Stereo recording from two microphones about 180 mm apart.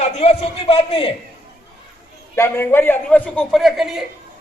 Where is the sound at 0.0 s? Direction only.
40° left (ahead or behind).